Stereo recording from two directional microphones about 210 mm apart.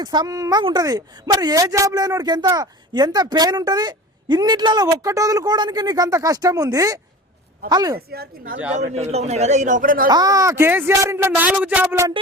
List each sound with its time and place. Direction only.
0.0 s a woman's voice: 20° right (ahead or behind)
7.9 s speech: 45° right (ahead or behind)
8.7 s a man's voice: 30° right (ahead or behind)
10.1 s a woman's voice: 20° right (ahead or behind)